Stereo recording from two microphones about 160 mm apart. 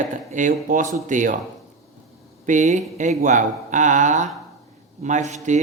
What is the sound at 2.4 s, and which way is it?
Speech, 50° right (ahead or behind).